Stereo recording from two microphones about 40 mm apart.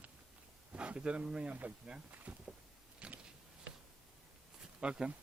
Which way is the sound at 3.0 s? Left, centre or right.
Right.